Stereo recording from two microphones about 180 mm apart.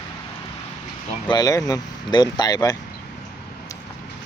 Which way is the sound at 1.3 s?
20° left (ahead or behind).